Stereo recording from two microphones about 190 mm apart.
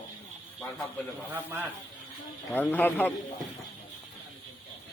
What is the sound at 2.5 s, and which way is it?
Speech, 10° left (ahead or behind).